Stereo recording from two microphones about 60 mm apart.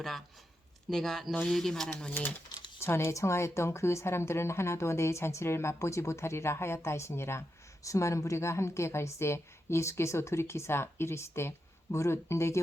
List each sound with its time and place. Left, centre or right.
0.9 s speech: centre
1.9 s speech: left
2.8 s a woman's voice: left